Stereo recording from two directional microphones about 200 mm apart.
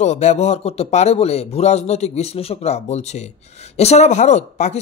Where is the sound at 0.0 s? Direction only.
35° left (ahead or behind).